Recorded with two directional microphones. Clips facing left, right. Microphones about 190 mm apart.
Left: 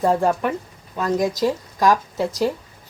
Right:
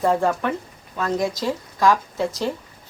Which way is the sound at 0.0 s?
15° left (ahead or behind).